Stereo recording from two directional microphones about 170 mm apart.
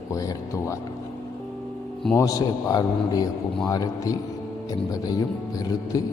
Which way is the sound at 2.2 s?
20° left (ahead or behind).